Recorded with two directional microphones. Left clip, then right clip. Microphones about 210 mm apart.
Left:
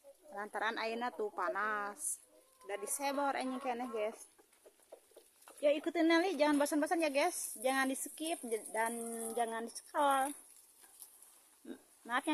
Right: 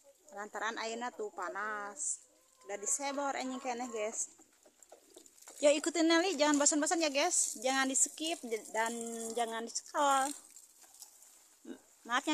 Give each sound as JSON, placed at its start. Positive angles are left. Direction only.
{"t": 0.3, "sound": "a woman's voice", "side_deg": 5}
{"t": 5.6, "sound": "speech", "side_deg": -20}
{"t": 6.0, "sound": "a woman's voice", "side_deg": -5}
{"t": 11.6, "sound": "a sound", "side_deg": -5}